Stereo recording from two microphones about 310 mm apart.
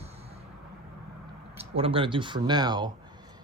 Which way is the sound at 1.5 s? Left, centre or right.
Centre.